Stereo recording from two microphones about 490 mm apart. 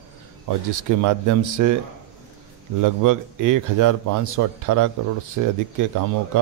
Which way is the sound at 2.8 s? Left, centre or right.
Right.